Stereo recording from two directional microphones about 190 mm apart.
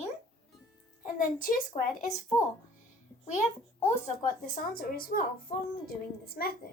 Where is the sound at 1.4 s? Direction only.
45° left (ahead or behind).